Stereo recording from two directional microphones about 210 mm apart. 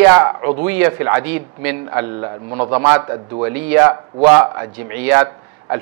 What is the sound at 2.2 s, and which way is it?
A man's voice, 25° right (ahead or behind).